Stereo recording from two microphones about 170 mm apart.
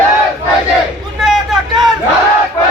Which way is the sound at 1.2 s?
Centre (ahead or behind).